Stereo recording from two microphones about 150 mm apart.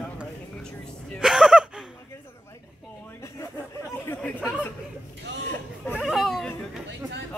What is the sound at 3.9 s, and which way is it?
Speech, 15° left (ahead or behind).